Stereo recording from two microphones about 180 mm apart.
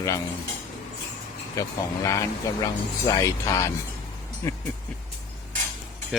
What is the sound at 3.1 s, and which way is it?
Speech, 15° left (ahead or behind).